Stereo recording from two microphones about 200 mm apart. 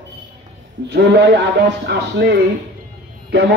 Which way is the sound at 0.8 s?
55° right (ahead or behind).